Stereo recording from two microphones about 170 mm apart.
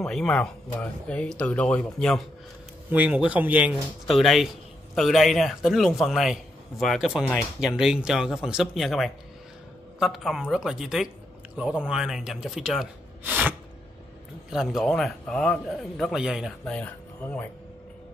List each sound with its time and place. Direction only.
0.0 s a man's voice: 5° left (ahead or behind)
2.9 s a man's voice: 10° right (ahead or behind); by 17.5 s 10° left (ahead or behind)